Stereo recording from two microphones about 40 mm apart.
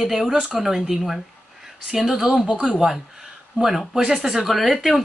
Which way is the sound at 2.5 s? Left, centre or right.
Right.